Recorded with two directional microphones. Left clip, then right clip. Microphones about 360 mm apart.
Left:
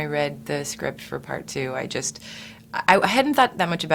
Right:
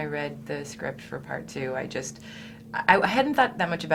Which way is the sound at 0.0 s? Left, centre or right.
Left.